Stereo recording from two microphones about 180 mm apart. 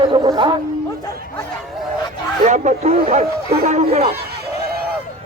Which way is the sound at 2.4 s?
40° right (ahead or behind).